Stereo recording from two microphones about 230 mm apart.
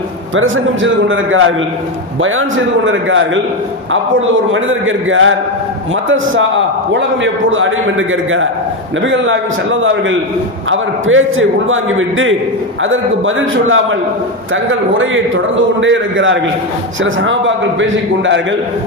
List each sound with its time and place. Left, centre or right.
0.3 s a man's voice: right
2.8 s a man's voice: right
4.5 s a man's voice: right